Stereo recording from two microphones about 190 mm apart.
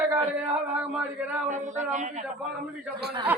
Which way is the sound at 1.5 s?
40° right (ahead or behind).